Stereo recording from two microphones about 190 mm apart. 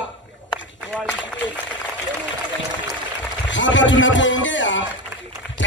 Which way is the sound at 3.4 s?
75° left (ahead or behind).